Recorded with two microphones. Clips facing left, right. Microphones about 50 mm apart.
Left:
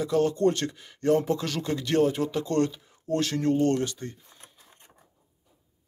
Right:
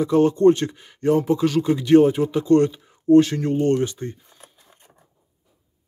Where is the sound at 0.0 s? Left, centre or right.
Right.